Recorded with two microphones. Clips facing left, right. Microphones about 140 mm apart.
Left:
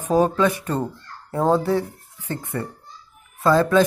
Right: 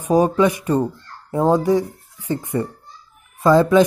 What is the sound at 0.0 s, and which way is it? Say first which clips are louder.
Speech: right 3 dB; 15° right (ahead or behind).